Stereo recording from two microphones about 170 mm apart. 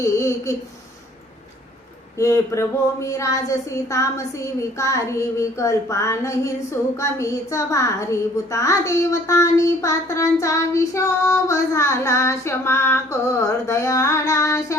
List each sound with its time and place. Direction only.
0.0 s speech: 15° left (ahead or behind)
2.1 s speech: 20° left (ahead or behind)